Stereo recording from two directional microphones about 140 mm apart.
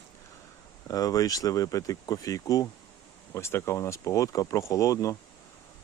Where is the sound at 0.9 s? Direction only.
25° left (ahead or behind).